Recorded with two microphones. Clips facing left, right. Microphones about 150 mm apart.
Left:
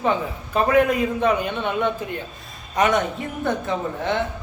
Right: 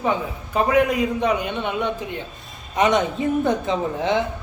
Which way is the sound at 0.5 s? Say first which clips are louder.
Even; 10° right (ahead or behind).